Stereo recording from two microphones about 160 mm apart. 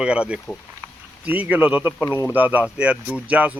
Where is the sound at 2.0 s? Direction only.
20° left (ahead or behind).